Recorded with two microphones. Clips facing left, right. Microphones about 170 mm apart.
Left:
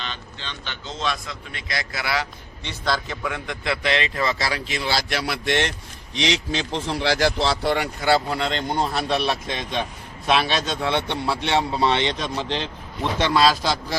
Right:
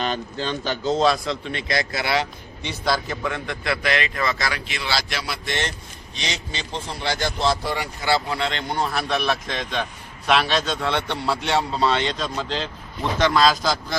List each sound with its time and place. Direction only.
0.0 s a man's voice: 45° right (ahead or behind); by 2.2 s 25° right (ahead or behind)
2.6 s a man's voice: 10° right (ahead or behind)
3.2 s a man's voice: 15° left (ahead or behind); by 4.8 s 30° left (ahead or behind)
4.8 s speech: 50° left (ahead or behind); by 5.7 s 65° left (ahead or behind)
6.1 s speech: 90° left; by 8.1 s 60° left (ahead or behind)
8.3 s speech: 40° left (ahead or behind)
9.0 s a man's voice: 15° left (ahead or behind)
13.4 s a man's voice: centre (ahead or behind)